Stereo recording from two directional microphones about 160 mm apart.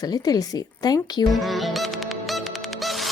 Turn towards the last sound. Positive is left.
turn(degrees=0)  # may be behind; listen again after turning